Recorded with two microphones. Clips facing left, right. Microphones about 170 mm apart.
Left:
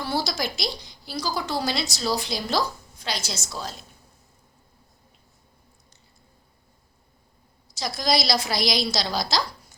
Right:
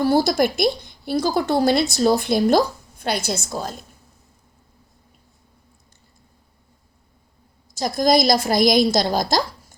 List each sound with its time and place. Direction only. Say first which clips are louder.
0.0 s speech: right 10 dB; 50° right (ahead or behind)
7.8 s a woman's voice: right 7 dB; 50° right (ahead or behind)